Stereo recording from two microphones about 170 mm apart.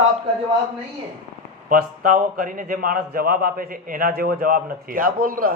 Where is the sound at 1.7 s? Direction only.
55° right (ahead or behind).